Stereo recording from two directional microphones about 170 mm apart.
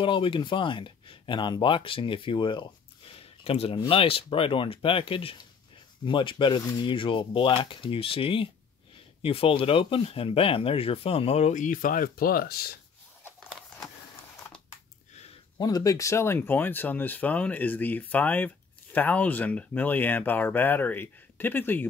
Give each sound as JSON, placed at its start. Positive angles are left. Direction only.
{"t": 0.0, "sound": "speech", "side_deg": 30}
{"t": 15.5, "sound": "speech", "side_deg": 20}